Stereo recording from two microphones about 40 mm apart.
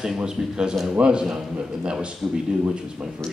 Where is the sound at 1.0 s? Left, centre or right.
Right.